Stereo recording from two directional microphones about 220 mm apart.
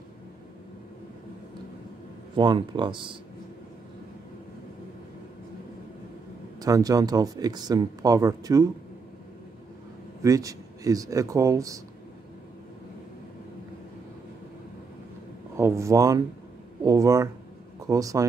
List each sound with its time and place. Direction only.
2.3 s speech: 20° right (ahead or behind)
6.6 s speech: 15° right (ahead or behind)
10.2 s speech: 15° right (ahead or behind)
15.5 s speech: 10° right (ahead or behind)